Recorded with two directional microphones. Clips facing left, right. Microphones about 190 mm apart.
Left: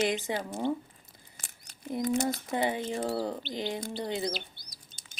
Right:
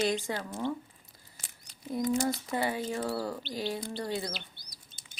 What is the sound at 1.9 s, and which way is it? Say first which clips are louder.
Speech: even; 20° left (ahead or behind).